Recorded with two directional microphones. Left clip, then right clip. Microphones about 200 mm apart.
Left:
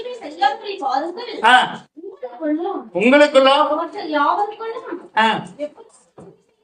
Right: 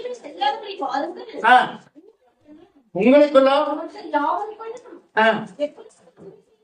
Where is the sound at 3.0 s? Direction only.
45° left (ahead or behind).